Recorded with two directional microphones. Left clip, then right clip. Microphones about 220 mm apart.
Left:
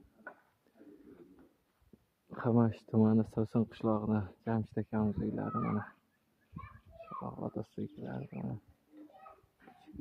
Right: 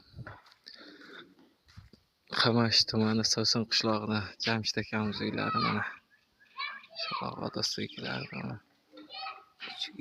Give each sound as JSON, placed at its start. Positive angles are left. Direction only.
{"t": 2.4, "sound": "speech", "side_deg": -10}
{"t": 7.0, "sound": "a sound", "side_deg": -20}
{"t": 7.3, "sound": "speech", "side_deg": -5}